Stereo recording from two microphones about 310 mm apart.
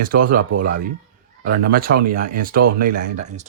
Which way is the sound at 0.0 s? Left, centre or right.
Right.